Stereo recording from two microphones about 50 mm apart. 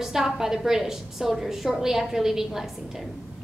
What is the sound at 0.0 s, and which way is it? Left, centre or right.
A woman's voice, centre.